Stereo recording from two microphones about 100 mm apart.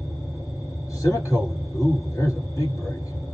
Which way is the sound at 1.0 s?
30° left (ahead or behind).